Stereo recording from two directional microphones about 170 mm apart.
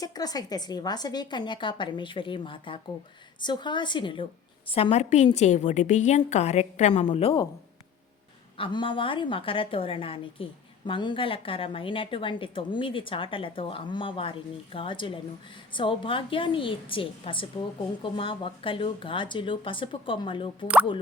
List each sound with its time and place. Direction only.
0.0 s a woman's voice: 20° left (ahead or behind)
8.5 s a woman's voice: 30° left (ahead or behind)